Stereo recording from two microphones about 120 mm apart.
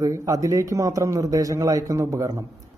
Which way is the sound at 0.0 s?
30° right (ahead or behind).